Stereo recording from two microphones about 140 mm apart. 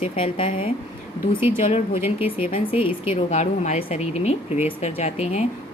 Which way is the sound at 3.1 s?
55° left (ahead or behind).